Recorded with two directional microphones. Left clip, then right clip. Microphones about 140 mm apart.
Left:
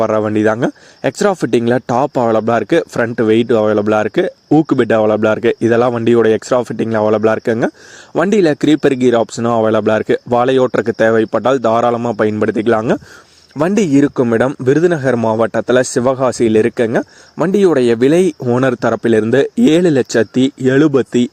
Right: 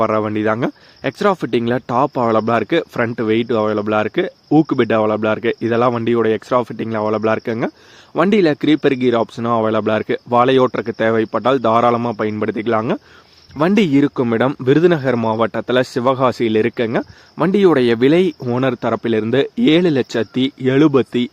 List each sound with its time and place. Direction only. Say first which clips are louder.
0.0 s speech: left 4 dB; 35° left (ahead or behind)
13.6 s speech: left 2 dB; 25° left (ahead or behind)